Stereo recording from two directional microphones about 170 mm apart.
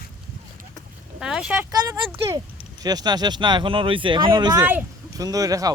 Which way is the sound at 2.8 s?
25° right (ahead or behind).